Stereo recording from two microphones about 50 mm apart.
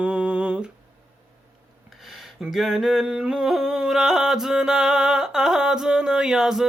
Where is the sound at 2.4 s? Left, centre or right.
Centre.